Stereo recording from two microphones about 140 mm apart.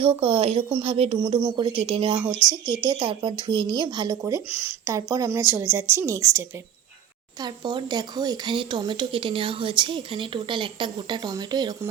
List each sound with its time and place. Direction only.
0.0 s speech: 45° right (ahead or behind)
1.4 s a woman's voice: 30° right (ahead or behind)
1.8 s a woman's voice: 40° right (ahead or behind); by 6.4 s 25° right (ahead or behind)
7.4 s speech: 35° right (ahead or behind)